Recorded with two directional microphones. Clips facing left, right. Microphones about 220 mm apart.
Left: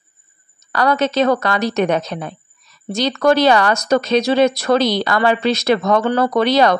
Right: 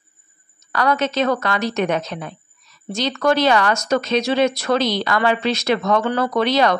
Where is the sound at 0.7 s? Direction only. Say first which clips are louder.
Left 3 dB; 35° left (ahead or behind).